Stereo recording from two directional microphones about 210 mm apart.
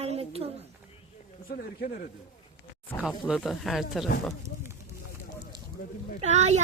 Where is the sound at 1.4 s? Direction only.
45° left (ahead or behind).